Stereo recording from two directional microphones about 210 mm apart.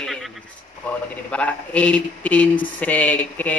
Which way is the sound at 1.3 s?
5° left (ahead or behind).